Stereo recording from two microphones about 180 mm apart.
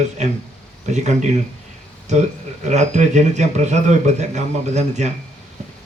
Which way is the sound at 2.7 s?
40° right (ahead or behind).